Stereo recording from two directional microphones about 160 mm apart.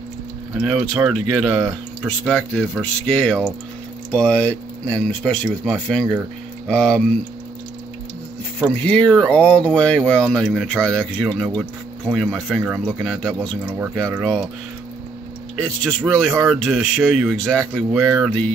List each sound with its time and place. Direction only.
0.6 s speech: 5° right (ahead or behind)
8.5 s speech: 5° left (ahead or behind)
13.7 s speech: 10° right (ahead or behind)
16.0 s speech: 5° right (ahead or behind)
17.6 s speech: 20° right (ahead or behind)
18.2 s speech: 5° left (ahead or behind)